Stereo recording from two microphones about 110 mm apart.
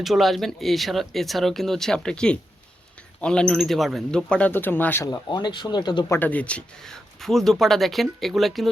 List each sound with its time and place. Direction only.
0.0 s speech: centre (ahead or behind); by 5.0 s 20° left (ahead or behind)
5.1 s speech: 40° left (ahead or behind)
6.1 s speech: 15° left (ahead or behind); by 8.7 s centre (ahead or behind)